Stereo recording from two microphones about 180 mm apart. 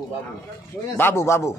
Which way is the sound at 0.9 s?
15° left (ahead or behind).